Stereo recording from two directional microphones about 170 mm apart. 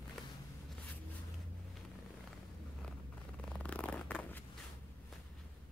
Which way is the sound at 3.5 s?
5° left (ahead or behind).